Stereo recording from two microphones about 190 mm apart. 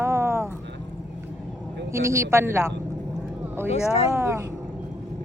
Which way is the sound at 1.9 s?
15° right (ahead or behind).